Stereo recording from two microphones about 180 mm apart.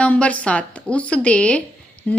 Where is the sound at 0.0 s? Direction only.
5° left (ahead or behind).